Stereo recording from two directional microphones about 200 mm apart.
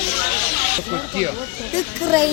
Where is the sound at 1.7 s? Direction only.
15° right (ahead or behind).